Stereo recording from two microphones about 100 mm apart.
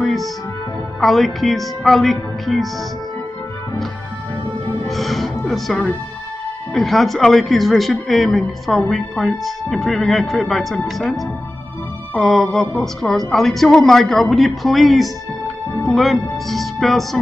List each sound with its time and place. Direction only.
0.0 s music: centre (ahead or behind)
1.0 s speech: centre (ahead or behind)
4.8 s music: centre (ahead or behind)
6.7 s speech: centre (ahead or behind)